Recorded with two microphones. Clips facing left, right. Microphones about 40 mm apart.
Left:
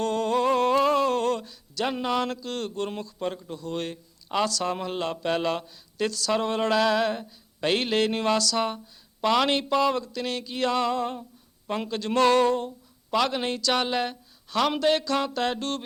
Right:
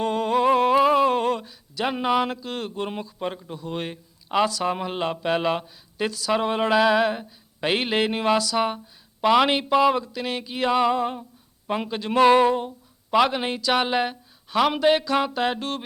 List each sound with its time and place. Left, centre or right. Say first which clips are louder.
0.0 s speech: right 3 dB; centre